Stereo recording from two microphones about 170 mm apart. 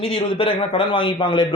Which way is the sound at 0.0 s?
35° left (ahead or behind).